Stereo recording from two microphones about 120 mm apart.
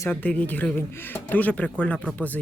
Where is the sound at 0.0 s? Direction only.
15° left (ahead or behind).